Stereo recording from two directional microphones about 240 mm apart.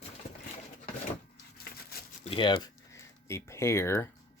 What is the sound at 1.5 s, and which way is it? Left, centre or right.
Crushing, left.